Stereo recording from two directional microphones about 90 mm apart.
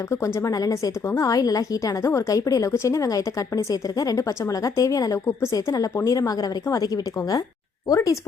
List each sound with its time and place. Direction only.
0.1 s a woman's voice: 35° left (ahead or behind)